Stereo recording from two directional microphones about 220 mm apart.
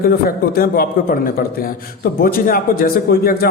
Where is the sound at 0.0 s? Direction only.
40° left (ahead or behind).